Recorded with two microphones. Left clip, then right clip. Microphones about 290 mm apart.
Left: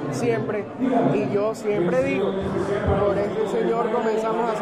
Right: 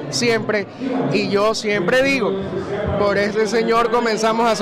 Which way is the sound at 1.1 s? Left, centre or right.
Right.